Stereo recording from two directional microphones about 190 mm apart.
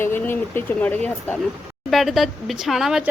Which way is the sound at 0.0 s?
10° left (ahead or behind).